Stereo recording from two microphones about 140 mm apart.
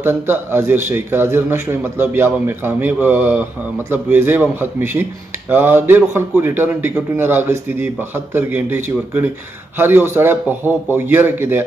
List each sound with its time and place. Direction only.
0.0 s a man's voice: 15° right (ahead or behind)